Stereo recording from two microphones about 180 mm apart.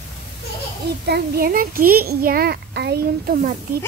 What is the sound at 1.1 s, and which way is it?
A child's voice, 60° right (ahead or behind).